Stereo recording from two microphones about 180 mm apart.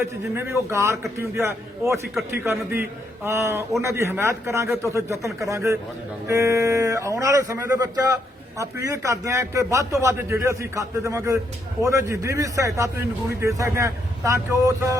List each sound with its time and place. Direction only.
0.3 s speech: 15° right (ahead or behind)